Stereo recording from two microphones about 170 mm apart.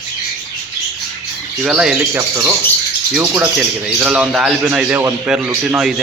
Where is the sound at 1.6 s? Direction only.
5° right (ahead or behind).